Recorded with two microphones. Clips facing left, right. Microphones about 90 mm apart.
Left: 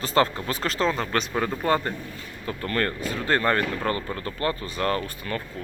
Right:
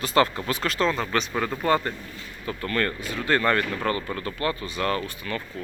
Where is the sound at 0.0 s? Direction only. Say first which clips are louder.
Right 1 dB; 35° left (ahead or behind).